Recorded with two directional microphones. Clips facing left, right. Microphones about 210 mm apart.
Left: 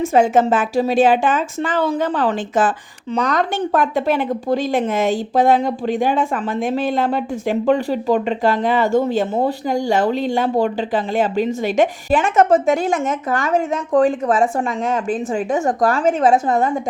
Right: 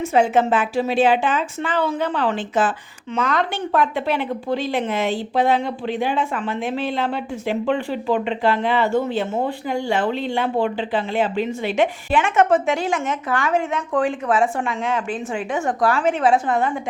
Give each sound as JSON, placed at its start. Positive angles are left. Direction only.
{"t": 0.0, "sound": "a woman's voice", "side_deg": 45}